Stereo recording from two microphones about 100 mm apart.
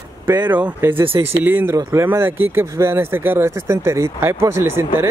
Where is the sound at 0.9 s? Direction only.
65° right (ahead or behind).